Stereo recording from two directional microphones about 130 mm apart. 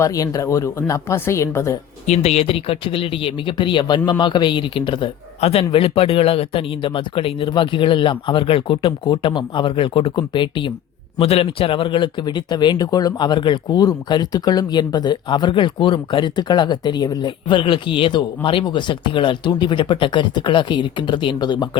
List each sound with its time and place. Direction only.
0.0 s speech: 25° left (ahead or behind)
2.0 s speech: 55° left (ahead or behind); by 5.1 s 40° left (ahead or behind)
5.4 s speech: 50° left (ahead or behind)